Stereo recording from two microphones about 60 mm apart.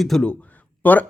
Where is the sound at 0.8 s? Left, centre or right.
Left.